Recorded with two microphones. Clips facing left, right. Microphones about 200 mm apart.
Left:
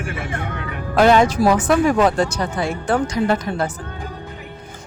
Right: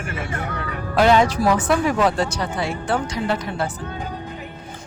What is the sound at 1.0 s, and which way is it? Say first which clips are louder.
Speech: left 2 dB; 50° left (ahead or behind).